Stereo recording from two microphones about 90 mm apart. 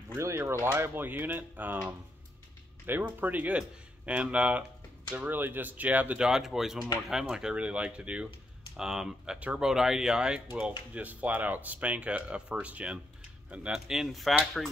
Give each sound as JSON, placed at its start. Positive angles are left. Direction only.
{"t": 0.4, "sound": "speech", "side_deg": -30}
{"t": 2.9, "sound": "speech", "side_deg": -20}